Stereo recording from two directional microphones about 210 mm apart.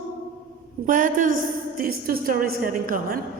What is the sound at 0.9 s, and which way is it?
A woman's voice, 40° right (ahead or behind).